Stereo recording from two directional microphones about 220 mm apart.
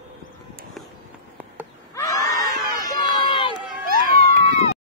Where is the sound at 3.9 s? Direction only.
40° right (ahead or behind).